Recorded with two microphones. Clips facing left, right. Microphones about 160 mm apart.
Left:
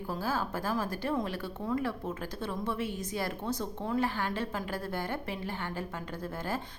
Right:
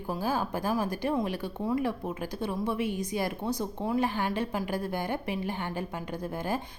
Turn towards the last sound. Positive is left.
turn(degrees=-15)  # may be behind; listen again after turning